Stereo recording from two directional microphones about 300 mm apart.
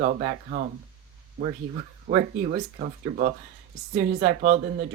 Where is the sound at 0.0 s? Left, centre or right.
Right.